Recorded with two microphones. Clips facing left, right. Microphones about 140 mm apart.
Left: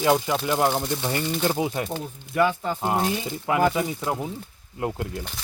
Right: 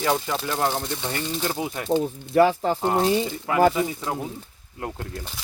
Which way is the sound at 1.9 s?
30° right (ahead or behind).